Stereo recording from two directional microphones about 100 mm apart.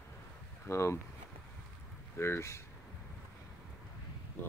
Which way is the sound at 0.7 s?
25° left (ahead or behind).